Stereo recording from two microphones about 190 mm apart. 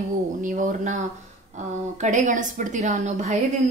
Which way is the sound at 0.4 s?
40° right (ahead or behind).